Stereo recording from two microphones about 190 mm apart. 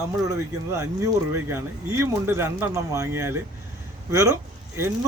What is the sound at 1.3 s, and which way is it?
Speech, 15° right (ahead or behind).